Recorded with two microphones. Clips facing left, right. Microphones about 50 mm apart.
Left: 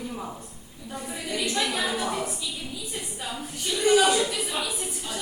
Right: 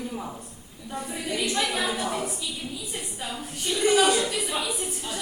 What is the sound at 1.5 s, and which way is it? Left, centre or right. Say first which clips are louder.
Speech: left 1 dB; centre.